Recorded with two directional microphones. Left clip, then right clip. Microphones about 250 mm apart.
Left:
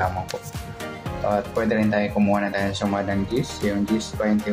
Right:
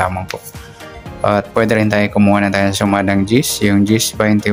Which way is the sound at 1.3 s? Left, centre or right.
Right.